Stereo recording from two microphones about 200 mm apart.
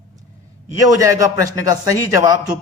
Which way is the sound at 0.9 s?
15° right (ahead or behind).